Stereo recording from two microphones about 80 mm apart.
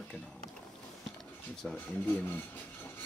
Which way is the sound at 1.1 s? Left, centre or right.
Centre.